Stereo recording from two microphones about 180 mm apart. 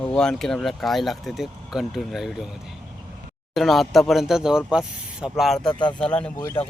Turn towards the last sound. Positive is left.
turn(degrees=15)  # may be behind; listen again after turning